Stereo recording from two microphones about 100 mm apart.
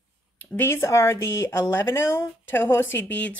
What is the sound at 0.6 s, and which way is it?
Speech, 25° left (ahead or behind).